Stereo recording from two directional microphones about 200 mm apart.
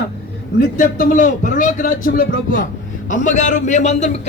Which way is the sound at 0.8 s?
40° left (ahead or behind).